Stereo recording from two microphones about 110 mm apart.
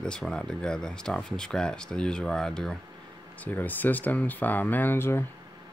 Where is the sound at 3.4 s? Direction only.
15° left (ahead or behind).